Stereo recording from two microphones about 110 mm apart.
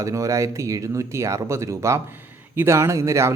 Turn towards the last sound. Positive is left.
turn(degrees=-25)  # may be behind; listen again after turning